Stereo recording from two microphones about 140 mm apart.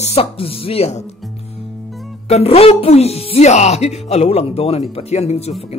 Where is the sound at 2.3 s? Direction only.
45° left (ahead or behind).